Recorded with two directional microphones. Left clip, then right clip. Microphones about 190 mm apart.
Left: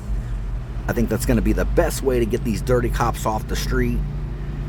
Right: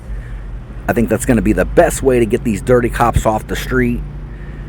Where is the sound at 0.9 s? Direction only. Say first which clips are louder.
Right 8 dB; 30° right (ahead or behind).